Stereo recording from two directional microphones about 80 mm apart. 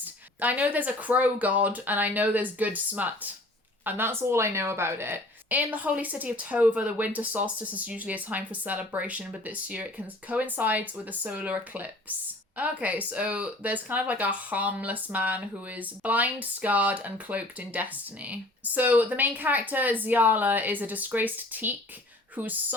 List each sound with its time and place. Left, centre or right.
0.0 s speech: right